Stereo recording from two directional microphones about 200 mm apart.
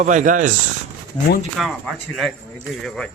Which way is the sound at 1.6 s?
Centre (ahead or behind).